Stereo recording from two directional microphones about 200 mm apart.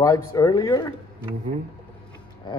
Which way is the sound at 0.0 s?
15° left (ahead or behind).